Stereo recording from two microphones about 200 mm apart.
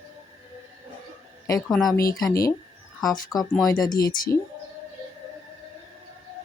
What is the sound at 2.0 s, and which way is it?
Speech, 15° left (ahead or behind).